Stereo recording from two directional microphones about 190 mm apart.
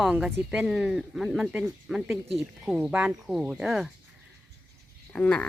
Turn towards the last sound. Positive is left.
turn(degrees=5)  # may be behind; listen again after turning